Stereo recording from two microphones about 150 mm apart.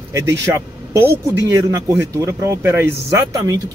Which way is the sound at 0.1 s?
15° right (ahead or behind).